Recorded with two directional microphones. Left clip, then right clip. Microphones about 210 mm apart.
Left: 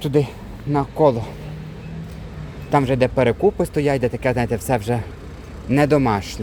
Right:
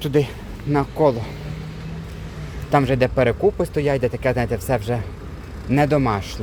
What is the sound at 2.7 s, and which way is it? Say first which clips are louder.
A man's voice: even; centre (ahead or behind).